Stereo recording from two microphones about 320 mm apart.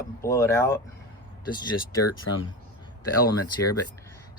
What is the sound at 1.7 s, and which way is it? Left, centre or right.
Speech, left.